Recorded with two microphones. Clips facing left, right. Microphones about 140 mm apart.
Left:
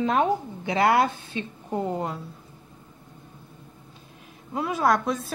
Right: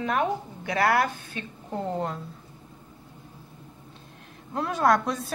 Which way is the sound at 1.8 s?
5° left (ahead or behind).